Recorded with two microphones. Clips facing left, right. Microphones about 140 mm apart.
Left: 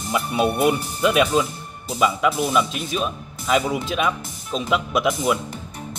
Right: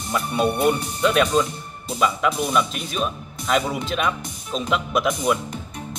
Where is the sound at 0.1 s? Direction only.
5° left (ahead or behind).